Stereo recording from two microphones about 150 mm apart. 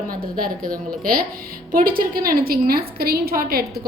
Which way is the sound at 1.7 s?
75° right (ahead or behind).